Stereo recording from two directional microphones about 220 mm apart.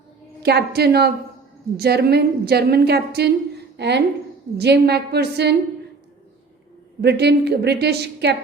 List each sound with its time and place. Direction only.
0.4 s a woman's voice: 45° right (ahead or behind)
7.0 s a woman's voice: 50° right (ahead or behind)